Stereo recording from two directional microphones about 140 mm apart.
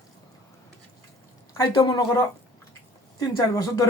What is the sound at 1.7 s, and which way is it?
Speech, 35° left (ahead or behind).